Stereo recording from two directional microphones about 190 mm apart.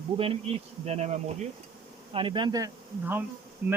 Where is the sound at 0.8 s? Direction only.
35° right (ahead or behind).